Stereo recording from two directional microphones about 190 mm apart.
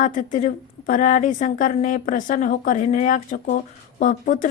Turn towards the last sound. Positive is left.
turn(degrees=45)  # may be behind; listen again after turning